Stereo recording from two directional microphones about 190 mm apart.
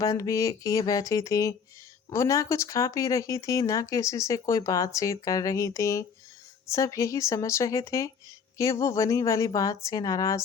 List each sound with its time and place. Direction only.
0.0 s speech: 15° left (ahead or behind)